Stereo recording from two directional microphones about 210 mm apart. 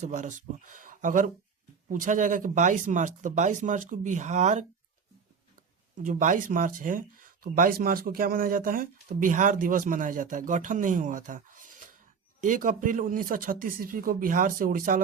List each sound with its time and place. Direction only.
0.0 s speech: 35° right (ahead or behind)
6.0 s speech: 35° right (ahead or behind)